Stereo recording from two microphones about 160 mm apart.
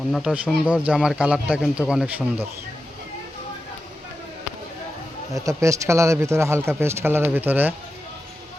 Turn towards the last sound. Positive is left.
turn(degrees=-10)  # may be behind; listen again after turning